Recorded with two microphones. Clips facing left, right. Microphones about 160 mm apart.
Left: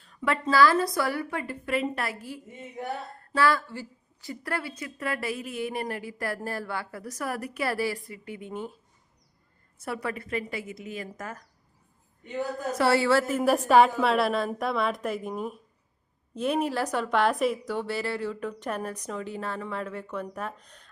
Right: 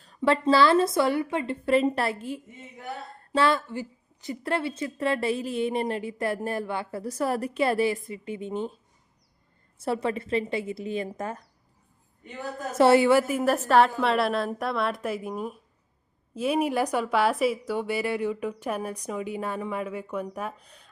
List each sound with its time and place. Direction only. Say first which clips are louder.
0.0 s a woman's voice: right 5 dB; 30° right (ahead or behind)
9.7 s a woman's voice: right 5 dB; 30° right (ahead or behind)
12.7 s a woman's voice: right 5 dB; 20° right (ahead or behind)
13.4 s a woman's voice: left 1 dB; 10° left (ahead or behind); by 20.9 s 10° right (ahead or behind)